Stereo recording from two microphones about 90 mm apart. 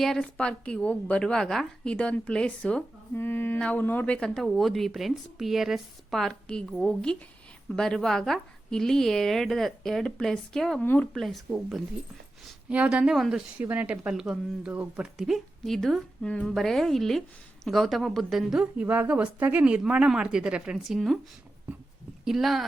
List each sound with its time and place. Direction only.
0.0 s a woman's voice: 5° left (ahead or behind)
3.2 s mantra: 25° left (ahead or behind)
3.6 s a woman's voice: 15° left (ahead or behind)
10.8 s a woman's voice: 15° left (ahead or behind)
11.1 s a woman's voice: centre (ahead or behind)
12.6 s a woman's voice: 15° right (ahead or behind)
13.6 s a woman's voice: 15° right (ahead or behind)
14.7 s speech: 20° right (ahead or behind)
15.0 s a woman's voice: 5° right (ahead or behind)
22.2 s speech: 5° right (ahead or behind)